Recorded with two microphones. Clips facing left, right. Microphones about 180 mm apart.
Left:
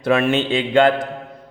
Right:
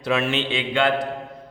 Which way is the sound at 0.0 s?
55° left (ahead or behind).